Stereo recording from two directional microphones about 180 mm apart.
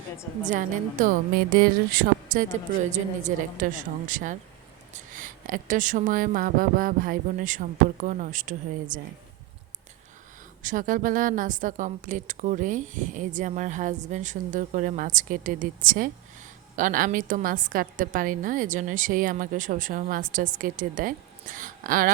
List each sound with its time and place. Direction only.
0.4 s a woman's voice: 45° right (ahead or behind)
10.6 s a woman's voice: 45° right (ahead or behind)